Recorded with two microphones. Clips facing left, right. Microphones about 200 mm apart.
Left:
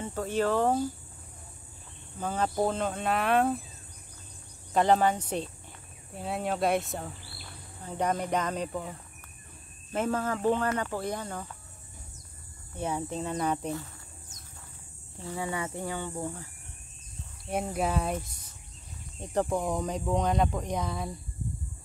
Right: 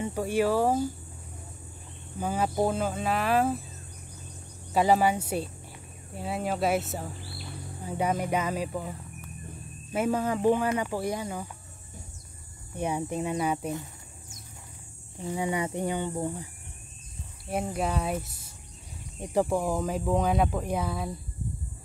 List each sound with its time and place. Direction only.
0.0 s speech: 10° right (ahead or behind)
2.1 s speech: 10° right (ahead or behind)
4.7 s speech: 5° right (ahead or behind)
12.7 s speech: 15° right (ahead or behind)
15.1 s speech: 20° right (ahead or behind)
17.5 s speech: centre (ahead or behind)